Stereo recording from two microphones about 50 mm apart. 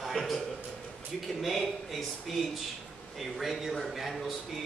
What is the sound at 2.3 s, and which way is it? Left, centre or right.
A man's voice, centre.